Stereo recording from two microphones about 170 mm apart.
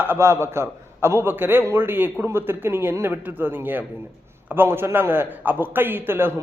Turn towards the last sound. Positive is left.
turn(degrees=-15)  # may be behind; listen again after turning